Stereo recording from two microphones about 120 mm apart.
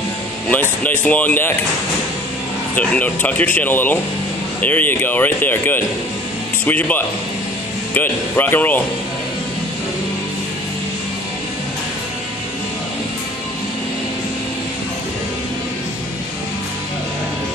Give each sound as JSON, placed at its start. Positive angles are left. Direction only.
{"t": 0.5, "sound": "speech", "side_deg": 15}
{"t": 2.7, "sound": "speech", "side_deg": 10}